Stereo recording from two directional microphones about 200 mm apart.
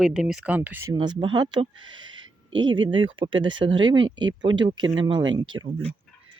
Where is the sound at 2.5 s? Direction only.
70° right (ahead or behind).